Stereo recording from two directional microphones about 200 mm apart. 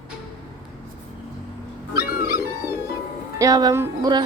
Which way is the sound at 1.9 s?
50° left (ahead or behind).